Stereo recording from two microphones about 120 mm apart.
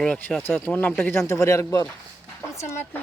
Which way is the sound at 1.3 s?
25° left (ahead or behind).